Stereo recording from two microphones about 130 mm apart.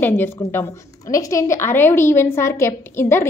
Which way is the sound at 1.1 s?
25° left (ahead or behind).